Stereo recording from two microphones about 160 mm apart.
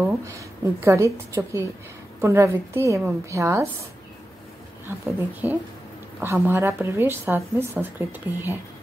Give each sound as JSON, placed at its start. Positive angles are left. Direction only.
{"t": 0.2, "sound": "a woman's voice", "side_deg": -20}
{"t": 4.8, "sound": "a woman's voice", "side_deg": -10}